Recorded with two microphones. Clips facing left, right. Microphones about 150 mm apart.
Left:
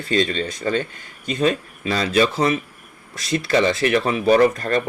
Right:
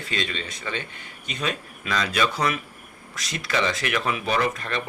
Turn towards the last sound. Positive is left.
turn(degrees=45)  # may be behind; listen again after turning